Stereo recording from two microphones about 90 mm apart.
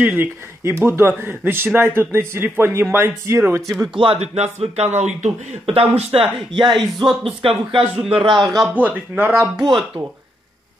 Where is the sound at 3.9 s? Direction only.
75° right (ahead or behind).